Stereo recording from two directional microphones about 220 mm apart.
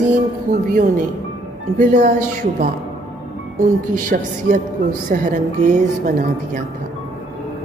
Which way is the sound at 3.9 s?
35° right (ahead or behind).